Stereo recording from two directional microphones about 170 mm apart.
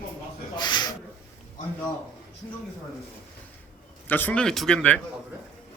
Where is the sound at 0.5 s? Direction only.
25° left (ahead or behind).